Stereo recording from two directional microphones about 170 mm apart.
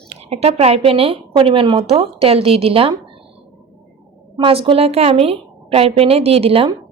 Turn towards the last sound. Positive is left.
turn(degrees=-35)  # may be behind; listen again after turning